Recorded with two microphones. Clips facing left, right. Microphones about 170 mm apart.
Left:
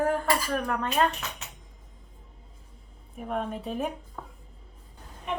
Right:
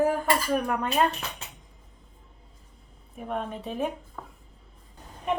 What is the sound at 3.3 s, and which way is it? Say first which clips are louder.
Speech: left 1 dB; centre (ahead or behind).